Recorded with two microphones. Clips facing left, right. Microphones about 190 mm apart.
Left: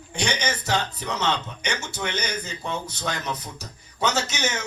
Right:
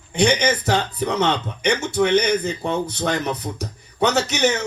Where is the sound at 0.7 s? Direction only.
55° right (ahead or behind).